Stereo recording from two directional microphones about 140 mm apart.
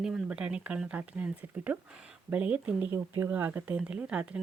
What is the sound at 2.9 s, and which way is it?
Speech, 20° right (ahead or behind).